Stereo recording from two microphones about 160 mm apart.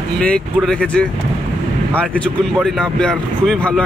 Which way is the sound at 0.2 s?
5° left (ahead or behind).